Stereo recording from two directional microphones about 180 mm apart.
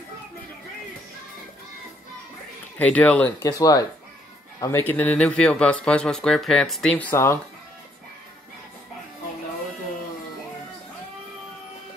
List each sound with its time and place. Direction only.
2.8 s speech: 10° left (ahead or behind)
3.4 s speech: 20° left (ahead or behind)